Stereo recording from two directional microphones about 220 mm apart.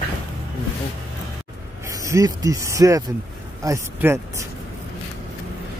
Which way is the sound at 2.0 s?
15° right (ahead or behind).